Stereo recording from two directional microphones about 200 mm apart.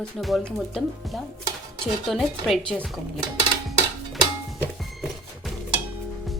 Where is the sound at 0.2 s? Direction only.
Centre (ahead or behind).